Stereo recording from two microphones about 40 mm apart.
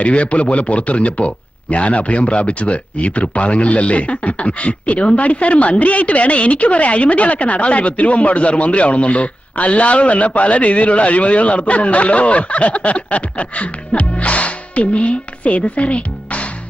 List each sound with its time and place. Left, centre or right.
0.0 s speech: left